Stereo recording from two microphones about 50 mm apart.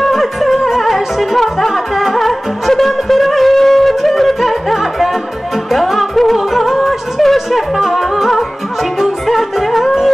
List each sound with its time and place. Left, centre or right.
0.0 s music: centre